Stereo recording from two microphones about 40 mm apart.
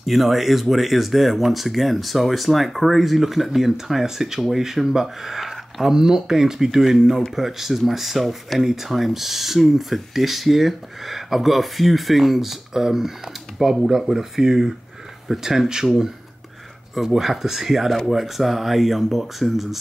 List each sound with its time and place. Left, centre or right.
0.0 s speech: centre